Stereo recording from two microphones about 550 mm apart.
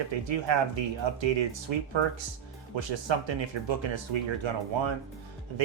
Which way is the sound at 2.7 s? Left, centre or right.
Right.